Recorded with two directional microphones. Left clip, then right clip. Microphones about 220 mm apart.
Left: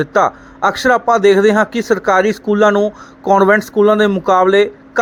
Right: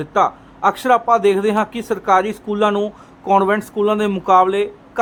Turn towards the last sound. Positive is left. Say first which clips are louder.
# left 8 dB
turn(degrees=15)  # may be behind; listen again after turning